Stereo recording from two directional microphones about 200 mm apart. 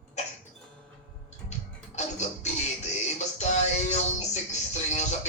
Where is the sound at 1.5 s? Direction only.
35° left (ahead or behind).